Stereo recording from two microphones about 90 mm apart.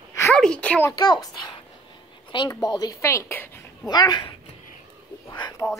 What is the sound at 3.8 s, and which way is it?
Speech, 50° left (ahead or behind).